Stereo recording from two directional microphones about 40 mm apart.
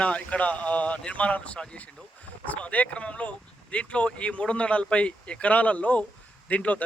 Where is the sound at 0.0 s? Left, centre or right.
Left.